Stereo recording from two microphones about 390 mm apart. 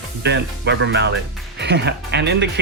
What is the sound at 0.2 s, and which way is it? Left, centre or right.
Speech, right.